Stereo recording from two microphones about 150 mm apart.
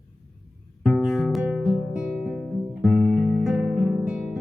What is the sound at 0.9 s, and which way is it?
Music, centre (ahead or behind).